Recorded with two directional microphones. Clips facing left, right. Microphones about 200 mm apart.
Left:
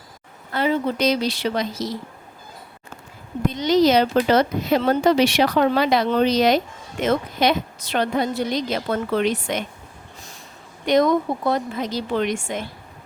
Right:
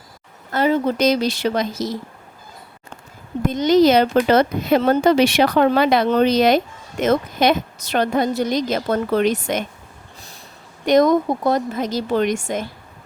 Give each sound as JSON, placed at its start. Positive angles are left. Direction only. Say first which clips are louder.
{"t": 0.5, "sound": "speech", "louder": "right 3 dB", "side_deg": -45}
{"t": 3.4, "sound": "speech", "louder": "right 3 dB", "side_deg": -50}
{"t": 10.8, "sound": "speech", "louder": "right 3 dB", "side_deg": -45}